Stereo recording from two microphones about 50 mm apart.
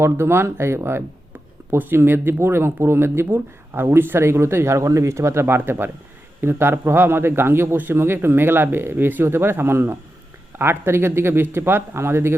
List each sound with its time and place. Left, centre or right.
0.0 s speech: right
1.8 s speech: right